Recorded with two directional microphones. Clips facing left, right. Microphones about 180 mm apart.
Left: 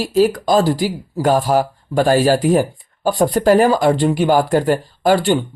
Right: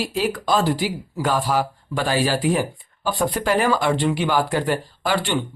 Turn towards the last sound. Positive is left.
turn(degrees=45)  # may be behind; listen again after turning